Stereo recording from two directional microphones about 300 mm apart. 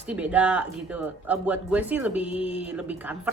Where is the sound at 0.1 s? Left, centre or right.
Centre.